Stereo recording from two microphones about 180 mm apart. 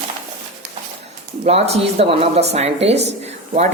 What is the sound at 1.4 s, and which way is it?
A woman's voice, 35° right (ahead or behind).